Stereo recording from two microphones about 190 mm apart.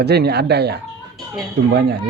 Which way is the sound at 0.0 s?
60° right (ahead or behind).